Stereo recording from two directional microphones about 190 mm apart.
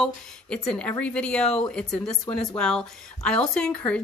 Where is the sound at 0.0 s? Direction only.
5° left (ahead or behind).